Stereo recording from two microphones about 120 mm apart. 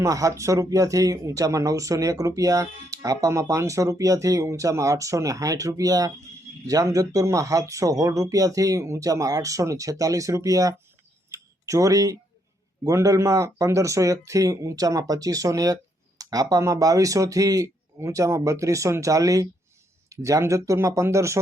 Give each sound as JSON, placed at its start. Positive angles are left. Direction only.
{"t": 0.0, "sound": "speech", "side_deg": -25}
{"t": 11.3, "sound": "a sound", "side_deg": -25}
{"t": 12.8, "sound": "speech", "side_deg": -25}